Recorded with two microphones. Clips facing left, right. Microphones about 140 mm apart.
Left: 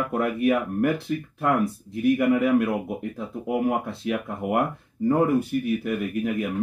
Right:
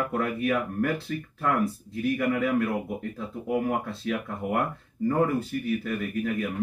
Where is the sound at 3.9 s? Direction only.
15° left (ahead or behind).